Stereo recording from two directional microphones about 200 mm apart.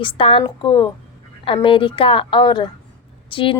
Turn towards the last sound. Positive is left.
turn(degrees=25)  # may be behind; listen again after turning